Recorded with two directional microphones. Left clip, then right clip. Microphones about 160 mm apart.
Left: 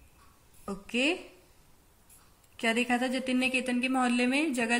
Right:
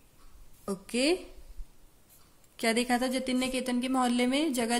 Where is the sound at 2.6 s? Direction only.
50° right (ahead or behind).